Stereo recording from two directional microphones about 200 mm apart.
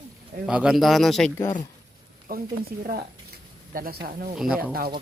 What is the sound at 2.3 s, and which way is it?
Speech, 45° right (ahead or behind).